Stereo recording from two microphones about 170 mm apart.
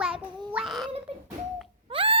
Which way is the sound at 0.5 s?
Centre (ahead or behind).